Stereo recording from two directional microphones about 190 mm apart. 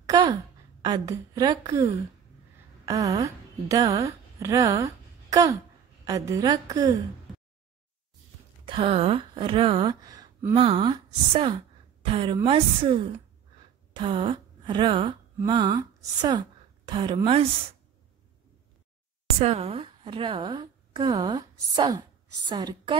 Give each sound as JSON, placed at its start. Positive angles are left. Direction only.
{"t": 0.0, "sound": "a sound", "side_deg": -20}
{"t": 0.8, "sound": "a woman's voice", "side_deg": -20}
{"t": 8.6, "sound": "speech", "side_deg": -30}
{"t": 10.5, "sound": "a woman's voice", "side_deg": -30}
{"t": 19.4, "sound": "a woman's voice", "side_deg": -35}